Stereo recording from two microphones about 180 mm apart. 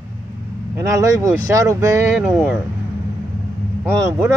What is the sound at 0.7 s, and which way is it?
Speech, 15° right (ahead or behind).